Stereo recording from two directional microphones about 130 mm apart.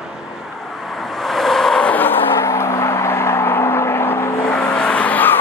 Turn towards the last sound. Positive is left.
turn(degrees=15)  # may be behind; listen again after turning